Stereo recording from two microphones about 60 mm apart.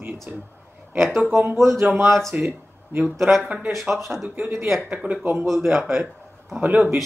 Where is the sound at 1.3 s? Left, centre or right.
Right.